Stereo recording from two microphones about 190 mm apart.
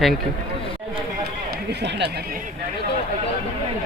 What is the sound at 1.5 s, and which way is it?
Run, 65° right (ahead or behind).